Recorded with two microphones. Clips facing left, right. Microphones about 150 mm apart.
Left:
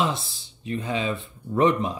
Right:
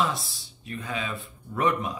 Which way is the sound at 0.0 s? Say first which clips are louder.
Left 2 dB; 25° left (ahead or behind).